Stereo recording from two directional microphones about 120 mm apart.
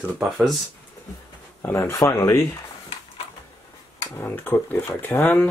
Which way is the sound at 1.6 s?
20° left (ahead or behind).